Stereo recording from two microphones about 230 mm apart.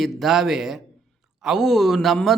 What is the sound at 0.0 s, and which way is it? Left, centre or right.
Speech, centre.